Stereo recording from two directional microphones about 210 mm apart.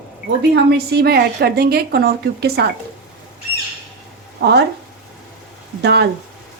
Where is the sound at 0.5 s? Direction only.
50° right (ahead or behind).